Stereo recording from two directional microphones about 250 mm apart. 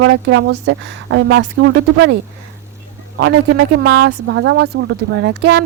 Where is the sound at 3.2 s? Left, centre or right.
Right.